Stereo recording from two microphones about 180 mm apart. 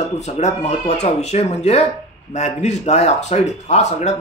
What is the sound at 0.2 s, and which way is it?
Speech, 40° left (ahead or behind).